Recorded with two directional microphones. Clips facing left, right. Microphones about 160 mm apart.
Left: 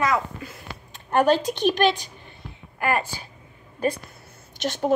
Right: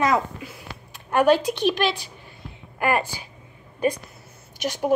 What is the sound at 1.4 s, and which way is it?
Speech, 40° left (ahead or behind).